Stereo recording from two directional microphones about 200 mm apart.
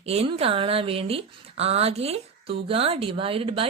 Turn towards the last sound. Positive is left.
turn(degrees=-25)  # may be behind; listen again after turning